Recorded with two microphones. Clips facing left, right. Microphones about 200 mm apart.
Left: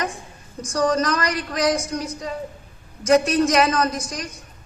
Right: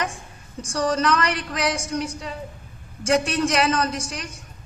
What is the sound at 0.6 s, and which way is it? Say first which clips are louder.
A woman's voice: left 2 dB; 35° left (ahead or behind).